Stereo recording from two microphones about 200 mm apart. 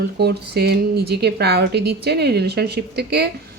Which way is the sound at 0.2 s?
55° right (ahead or behind).